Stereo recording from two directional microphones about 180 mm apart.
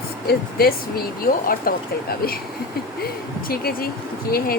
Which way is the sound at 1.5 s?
55° left (ahead or behind).